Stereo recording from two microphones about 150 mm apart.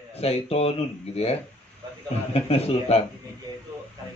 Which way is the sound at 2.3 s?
40° left (ahead or behind).